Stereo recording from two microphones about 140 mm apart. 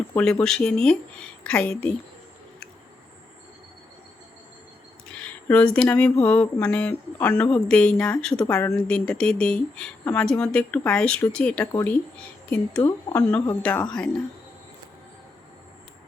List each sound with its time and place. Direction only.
0.1 s speech: 10° left (ahead or behind)
5.1 s a sound: 10° left (ahead or behind)
6.2 s speech: 10° left (ahead or behind)
13.3 s speech: 10° left (ahead or behind)